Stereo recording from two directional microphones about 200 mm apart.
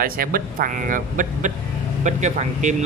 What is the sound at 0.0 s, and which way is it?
Speech, 45° right (ahead or behind).